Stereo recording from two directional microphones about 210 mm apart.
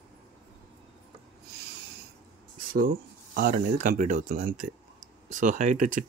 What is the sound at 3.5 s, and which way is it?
Speech, 40° right (ahead or behind).